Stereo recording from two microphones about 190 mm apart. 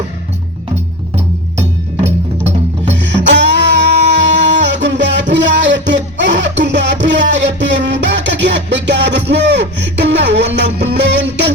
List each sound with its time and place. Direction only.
1.1 s music: 35° right (ahead or behind)
2.8 s music: 70° right (ahead or behind)